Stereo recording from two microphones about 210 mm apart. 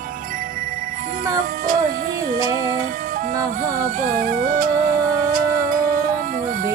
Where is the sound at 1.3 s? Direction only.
40° right (ahead or behind).